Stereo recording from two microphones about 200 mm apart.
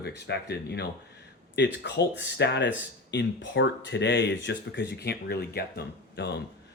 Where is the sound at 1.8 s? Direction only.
65° left (ahead or behind).